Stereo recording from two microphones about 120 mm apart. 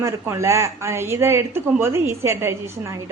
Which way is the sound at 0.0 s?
25° right (ahead or behind).